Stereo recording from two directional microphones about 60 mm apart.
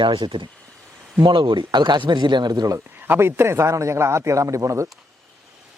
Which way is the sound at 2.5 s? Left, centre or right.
Right.